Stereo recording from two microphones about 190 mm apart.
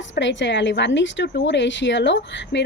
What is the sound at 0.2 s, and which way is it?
A woman's voice, 70° left (ahead or behind).